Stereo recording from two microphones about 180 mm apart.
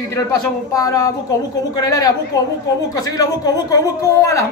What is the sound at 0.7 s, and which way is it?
Speech, 20° left (ahead or behind).